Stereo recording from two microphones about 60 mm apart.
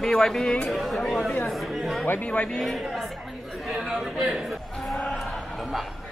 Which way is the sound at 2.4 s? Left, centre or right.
Centre.